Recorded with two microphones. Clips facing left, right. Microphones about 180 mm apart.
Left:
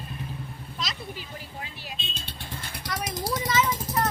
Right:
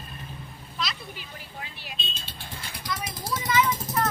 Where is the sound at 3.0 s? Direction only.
40° left (ahead or behind).